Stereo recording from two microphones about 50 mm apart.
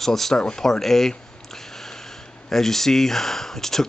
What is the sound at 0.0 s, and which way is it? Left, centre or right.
Speech, centre.